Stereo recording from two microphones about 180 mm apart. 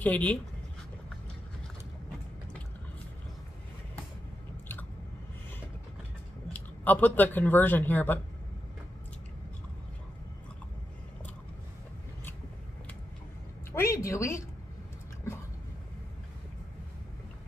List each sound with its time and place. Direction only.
0.0 s speech: 10° left (ahead or behind)
6.5 s speech: 10° left (ahead or behind)
13.7 s a sound: 15° left (ahead or behind)